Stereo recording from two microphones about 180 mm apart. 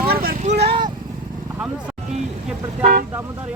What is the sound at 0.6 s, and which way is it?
Vehicle, 30° right (ahead or behind).